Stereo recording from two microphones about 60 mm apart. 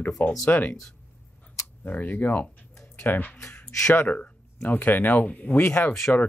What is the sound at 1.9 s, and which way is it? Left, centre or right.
Speech, left.